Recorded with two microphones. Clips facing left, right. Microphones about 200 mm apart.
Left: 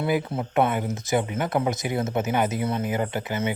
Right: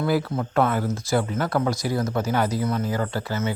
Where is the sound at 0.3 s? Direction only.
20° left (ahead or behind).